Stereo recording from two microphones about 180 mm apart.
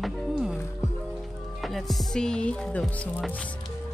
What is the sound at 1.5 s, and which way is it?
Speech, centre (ahead or behind).